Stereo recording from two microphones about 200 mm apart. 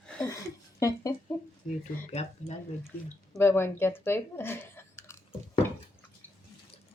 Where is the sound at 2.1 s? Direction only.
35° left (ahead or behind).